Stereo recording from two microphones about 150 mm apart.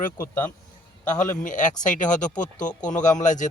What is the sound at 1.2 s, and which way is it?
Speech, 60° left (ahead or behind).